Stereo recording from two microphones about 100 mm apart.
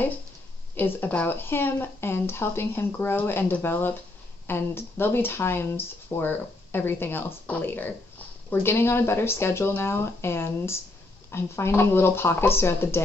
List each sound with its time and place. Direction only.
0.7 s speech: 20° left (ahead or behind)